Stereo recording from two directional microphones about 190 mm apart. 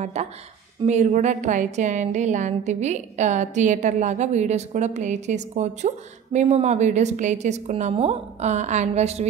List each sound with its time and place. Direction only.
0.0 s a woman's voice: 35° right (ahead or behind)